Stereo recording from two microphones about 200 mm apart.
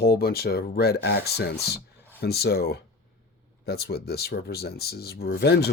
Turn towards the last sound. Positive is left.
turn(degrees=55)  # may be behind; listen again after turning